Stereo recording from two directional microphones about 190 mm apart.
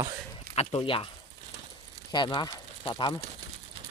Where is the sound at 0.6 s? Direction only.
30° left (ahead or behind).